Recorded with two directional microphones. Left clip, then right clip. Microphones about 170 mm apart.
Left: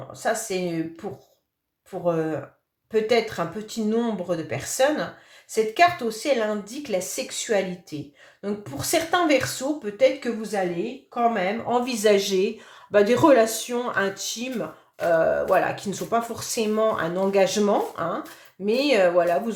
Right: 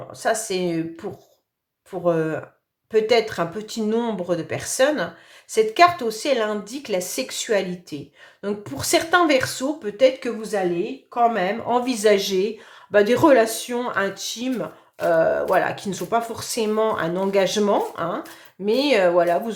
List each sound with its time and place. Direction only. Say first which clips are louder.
0.1 s speech: right 3 dB; 30° right (ahead or behind)